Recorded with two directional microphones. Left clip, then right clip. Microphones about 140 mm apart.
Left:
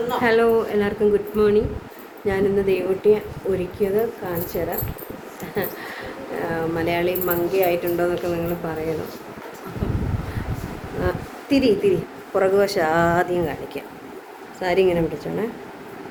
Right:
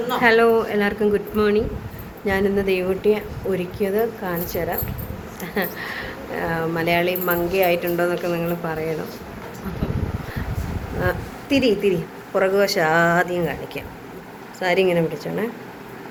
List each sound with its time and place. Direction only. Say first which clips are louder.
0.2 s a woman's voice: right 2 dB; 5° left (ahead or behind)
2.2 s speech: even; 5° left (ahead or behind)
11.4 s speech: even; 20° left (ahead or behind)
12.4 s a woman's voice: even; 30° left (ahead or behind); by 15.0 s 15° left (ahead or behind)